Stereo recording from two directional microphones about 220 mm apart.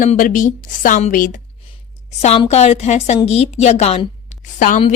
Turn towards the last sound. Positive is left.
turn(degrees=35)  # may be behind; listen again after turning